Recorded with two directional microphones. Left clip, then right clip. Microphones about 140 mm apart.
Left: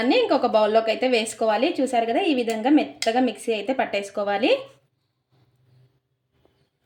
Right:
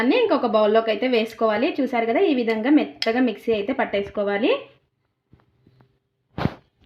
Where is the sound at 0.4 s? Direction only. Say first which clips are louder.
Right 1 dB; 15° right (ahead or behind).